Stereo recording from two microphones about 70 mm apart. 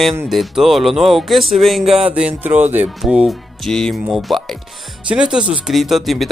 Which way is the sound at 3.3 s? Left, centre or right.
Centre.